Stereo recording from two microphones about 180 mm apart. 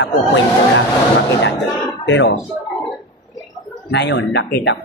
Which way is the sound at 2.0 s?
90° left.